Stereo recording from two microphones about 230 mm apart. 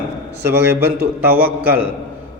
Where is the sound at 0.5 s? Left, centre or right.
Right.